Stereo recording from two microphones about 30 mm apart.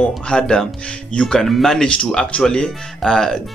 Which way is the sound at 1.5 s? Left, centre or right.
Centre.